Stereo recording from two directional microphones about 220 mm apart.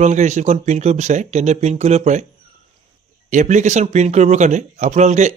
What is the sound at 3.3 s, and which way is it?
Speech, 35° right (ahead or behind).